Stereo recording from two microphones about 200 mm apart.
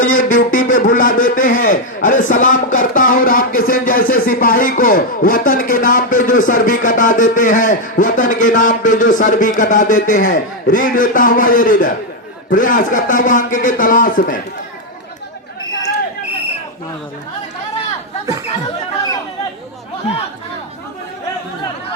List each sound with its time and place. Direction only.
0.2 s a man's voice: 40° left (ahead or behind)